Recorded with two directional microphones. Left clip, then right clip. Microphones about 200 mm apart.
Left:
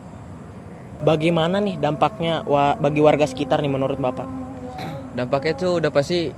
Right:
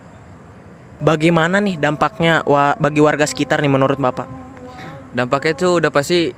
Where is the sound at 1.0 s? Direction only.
45° right (ahead or behind).